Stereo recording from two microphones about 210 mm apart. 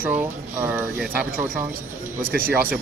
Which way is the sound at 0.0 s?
10° right (ahead or behind).